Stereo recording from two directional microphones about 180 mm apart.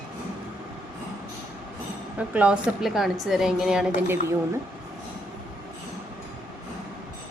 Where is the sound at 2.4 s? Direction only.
5° right (ahead or behind).